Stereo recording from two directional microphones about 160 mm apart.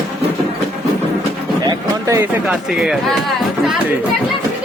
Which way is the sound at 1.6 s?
20° right (ahead or behind).